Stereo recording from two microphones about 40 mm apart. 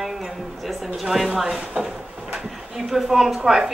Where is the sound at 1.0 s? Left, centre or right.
Centre.